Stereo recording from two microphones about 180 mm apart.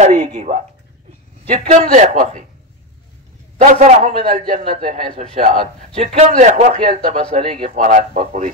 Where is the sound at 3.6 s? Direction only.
40° right (ahead or behind).